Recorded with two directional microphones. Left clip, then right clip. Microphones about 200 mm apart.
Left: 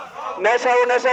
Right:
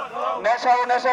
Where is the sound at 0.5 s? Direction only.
20° left (ahead or behind).